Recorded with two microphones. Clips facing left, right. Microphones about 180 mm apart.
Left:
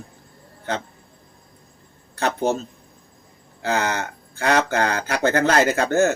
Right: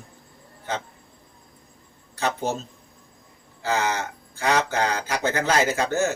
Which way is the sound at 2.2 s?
60° left (ahead or behind).